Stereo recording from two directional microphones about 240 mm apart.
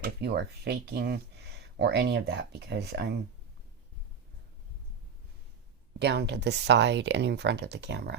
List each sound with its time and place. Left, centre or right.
0.0 s speech: right
6.0 s speech: right